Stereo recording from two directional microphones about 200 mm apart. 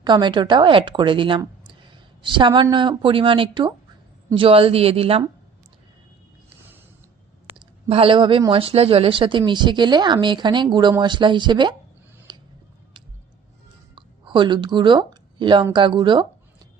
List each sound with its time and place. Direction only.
0.0 s a woman's voice: 20° right (ahead or behind)
7.5 s speech: 25° right (ahead or behind)
12.3 s a sound: 20° right (ahead or behind)
13.9 s speech: 25° right (ahead or behind)